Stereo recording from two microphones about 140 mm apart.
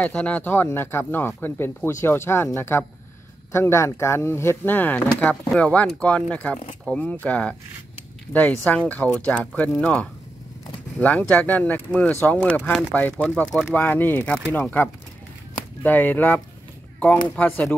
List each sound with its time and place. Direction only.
0.0 s speech: 10° left (ahead or behind)
17.4 s speech: 10° left (ahead or behind)